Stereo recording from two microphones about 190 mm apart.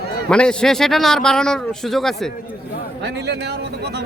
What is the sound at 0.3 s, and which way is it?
Speech, 5° left (ahead or behind).